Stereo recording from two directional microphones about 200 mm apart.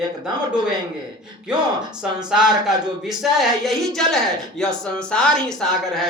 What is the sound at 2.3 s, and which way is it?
Speech, centre (ahead or behind).